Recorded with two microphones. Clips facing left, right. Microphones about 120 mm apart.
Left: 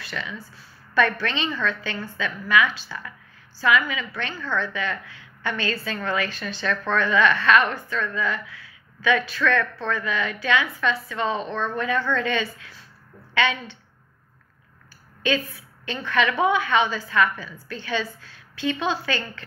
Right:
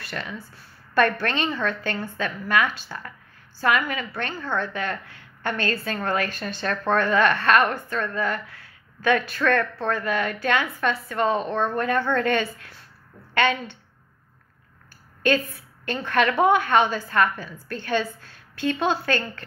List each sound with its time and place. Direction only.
0.0 s a woman's voice: 45° right (ahead or behind)
15.2 s speech: 45° right (ahead or behind)